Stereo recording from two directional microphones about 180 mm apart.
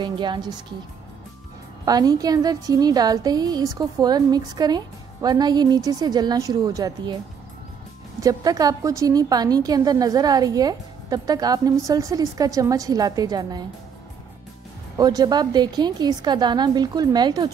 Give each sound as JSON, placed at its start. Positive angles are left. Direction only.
{"t": 0.0, "sound": "a woman's voice", "side_deg": -25}
{"t": 1.9, "sound": "a woman's voice", "side_deg": -20}
{"t": 8.2, "sound": "a woman's voice", "side_deg": -20}
{"t": 15.0, "sound": "a woman's voice", "side_deg": -20}